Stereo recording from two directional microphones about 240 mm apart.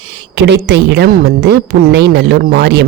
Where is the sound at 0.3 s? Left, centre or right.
Right.